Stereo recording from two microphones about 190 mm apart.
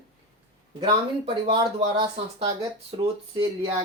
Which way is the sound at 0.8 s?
30° right (ahead or behind).